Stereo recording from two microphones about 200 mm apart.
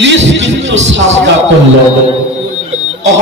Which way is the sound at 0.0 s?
65° right (ahead or behind).